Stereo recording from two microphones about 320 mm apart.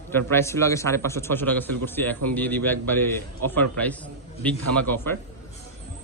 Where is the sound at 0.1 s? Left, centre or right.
Centre.